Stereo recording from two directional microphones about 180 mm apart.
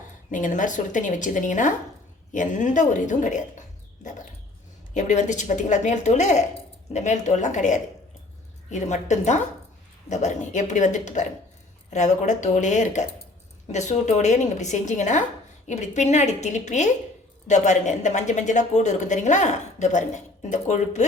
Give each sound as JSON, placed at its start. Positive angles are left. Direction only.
{"t": 0.3, "sound": "speech", "side_deg": 45}
{"t": 4.0, "sound": "dog", "side_deg": 45}
{"t": 4.9, "sound": "a woman's voice", "side_deg": 45}